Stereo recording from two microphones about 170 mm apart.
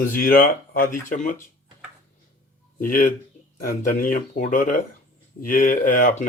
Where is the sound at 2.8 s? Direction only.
50° left (ahead or behind).